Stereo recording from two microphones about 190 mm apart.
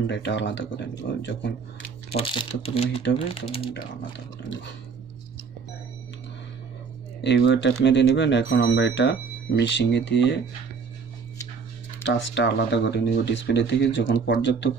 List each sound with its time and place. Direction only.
0.0 s speech: 70° left (ahead or behind)
2.0 s speech: 30° left (ahead or behind)
7.2 s speech: 65° left (ahead or behind)
12.0 s speech: 65° left (ahead or behind)